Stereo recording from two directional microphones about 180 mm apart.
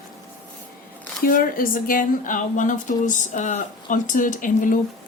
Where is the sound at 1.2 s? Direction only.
50° left (ahead or behind).